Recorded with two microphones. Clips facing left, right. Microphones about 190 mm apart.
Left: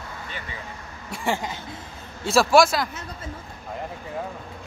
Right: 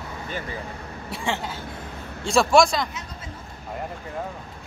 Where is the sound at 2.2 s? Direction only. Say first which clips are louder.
Even; centre (ahead or behind).